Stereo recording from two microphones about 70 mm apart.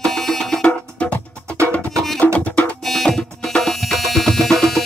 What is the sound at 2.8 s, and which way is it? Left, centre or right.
Music, centre.